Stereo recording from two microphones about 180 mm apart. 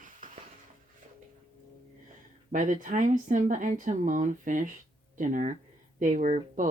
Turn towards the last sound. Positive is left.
turn(degrees=-45)  # may be behind; listen again after turning